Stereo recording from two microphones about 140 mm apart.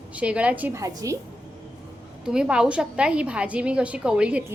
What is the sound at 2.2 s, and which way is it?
A woman's voice, 5° right (ahead or behind).